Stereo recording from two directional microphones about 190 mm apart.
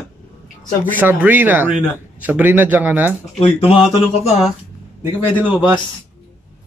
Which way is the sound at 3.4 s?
30° left (ahead or behind).